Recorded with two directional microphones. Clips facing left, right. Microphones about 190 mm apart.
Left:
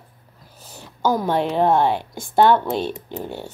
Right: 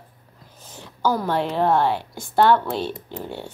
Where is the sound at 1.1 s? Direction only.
15° left (ahead or behind).